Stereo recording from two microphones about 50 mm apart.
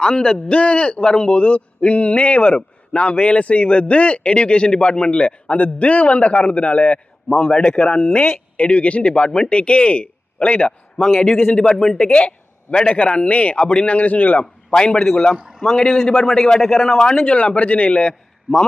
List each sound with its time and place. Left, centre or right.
0.0 s a man's voice: centre
7.3 s a man's voice: centre; by 14.4 s left
14.7 s a man's voice: centre
17.2 s a man's voice: left